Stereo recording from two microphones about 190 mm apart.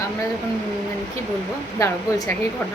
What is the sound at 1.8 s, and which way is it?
Speech, 20° left (ahead or behind).